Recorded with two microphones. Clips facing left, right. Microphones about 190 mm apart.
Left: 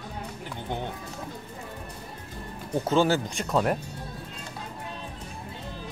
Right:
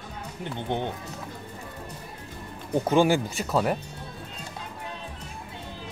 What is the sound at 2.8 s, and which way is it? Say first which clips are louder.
Speech: right 2 dB; 15° right (ahead or behind).